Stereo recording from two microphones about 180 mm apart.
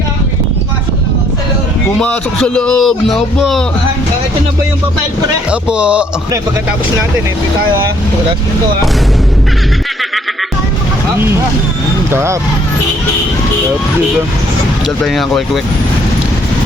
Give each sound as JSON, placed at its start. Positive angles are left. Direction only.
{"t": 2.0, "sound": "speech", "side_deg": 5}
{"t": 5.5, "sound": "speech", "side_deg": -5}
{"t": 12.1, "sound": "speech", "side_deg": -15}
{"t": 15.0, "sound": "speech", "side_deg": 0}